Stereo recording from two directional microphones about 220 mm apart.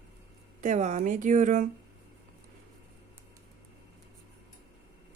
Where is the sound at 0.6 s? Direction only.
30° right (ahead or behind).